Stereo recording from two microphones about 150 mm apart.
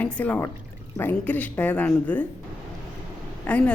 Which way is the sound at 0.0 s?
10° left (ahead or behind).